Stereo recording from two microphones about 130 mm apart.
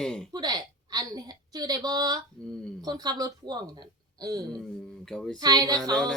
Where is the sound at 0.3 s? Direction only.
30° right (ahead or behind).